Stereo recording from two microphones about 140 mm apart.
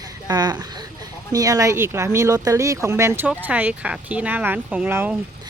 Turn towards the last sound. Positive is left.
turn(degrees=-15)  # may be behind; listen again after turning